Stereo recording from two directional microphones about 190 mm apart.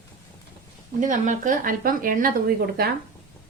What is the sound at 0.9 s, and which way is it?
Speech, 40° right (ahead or behind).